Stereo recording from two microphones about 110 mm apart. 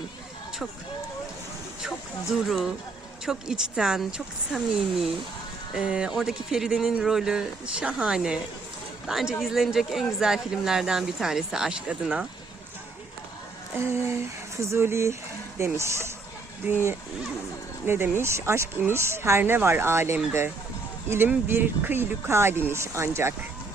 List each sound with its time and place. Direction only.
2.3 s speech: 5° right (ahead or behind)
13.7 s speech: 25° right (ahead or behind)